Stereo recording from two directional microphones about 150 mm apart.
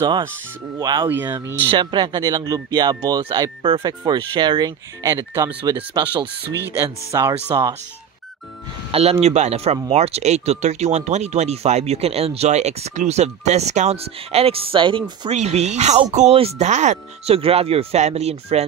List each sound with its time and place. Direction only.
0.7 s speech: 25° right (ahead or behind)
1.0 s speech: 15° right (ahead or behind)
1.7 s speech: 30° right (ahead or behind)
7.1 s speech: 20° right (ahead or behind)
8.9 s speech: 45° right (ahead or behind)
15.3 s speech: 50° right (ahead or behind)